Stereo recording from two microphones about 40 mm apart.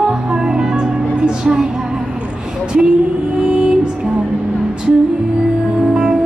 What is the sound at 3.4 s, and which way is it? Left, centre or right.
Music, right.